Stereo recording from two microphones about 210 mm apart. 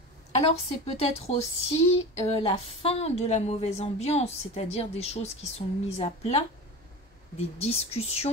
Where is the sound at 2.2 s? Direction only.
30° left (ahead or behind).